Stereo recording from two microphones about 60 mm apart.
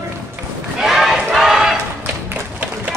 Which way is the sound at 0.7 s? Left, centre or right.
Centre.